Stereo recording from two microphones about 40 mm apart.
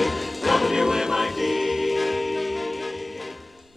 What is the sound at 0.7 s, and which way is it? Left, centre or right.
Music, centre.